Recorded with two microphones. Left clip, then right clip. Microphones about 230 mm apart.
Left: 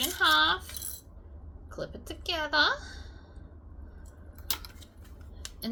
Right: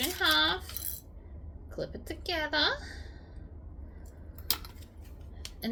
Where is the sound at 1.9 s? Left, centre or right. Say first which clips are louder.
Left 1 dB; centre.